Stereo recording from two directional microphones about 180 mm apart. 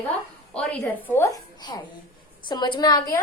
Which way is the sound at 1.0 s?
15° left (ahead or behind).